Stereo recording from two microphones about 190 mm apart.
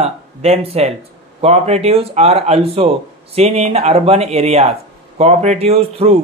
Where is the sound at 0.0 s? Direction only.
35° right (ahead or behind).